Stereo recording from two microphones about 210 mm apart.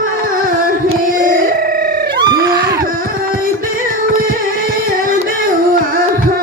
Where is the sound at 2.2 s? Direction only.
20° right (ahead or behind).